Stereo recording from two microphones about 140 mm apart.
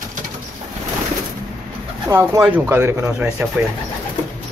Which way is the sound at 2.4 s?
5° right (ahead or behind).